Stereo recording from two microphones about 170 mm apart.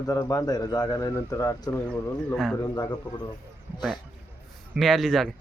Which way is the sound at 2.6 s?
25° left (ahead or behind).